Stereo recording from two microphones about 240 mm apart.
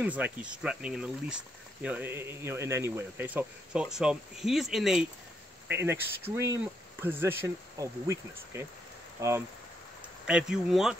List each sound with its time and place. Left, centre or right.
0.0 s speech: centre